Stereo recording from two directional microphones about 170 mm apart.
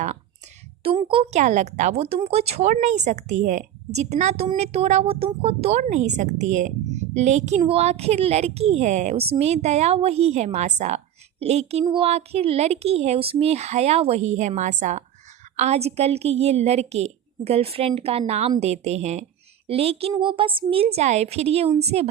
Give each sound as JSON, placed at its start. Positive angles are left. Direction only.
{"t": 0.9, "sound": "a woman's voice", "side_deg": -30}